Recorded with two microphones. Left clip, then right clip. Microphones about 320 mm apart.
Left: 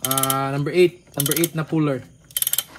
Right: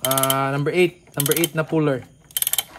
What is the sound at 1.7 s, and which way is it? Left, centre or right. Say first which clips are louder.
Speech: right 2 dB; centre.